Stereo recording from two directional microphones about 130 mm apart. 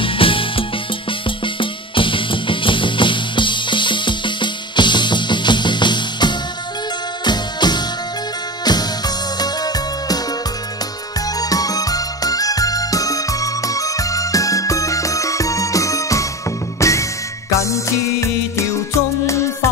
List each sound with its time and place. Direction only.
0.0 s music: 40° left (ahead or behind)
11.3 s music: 30° left (ahead or behind)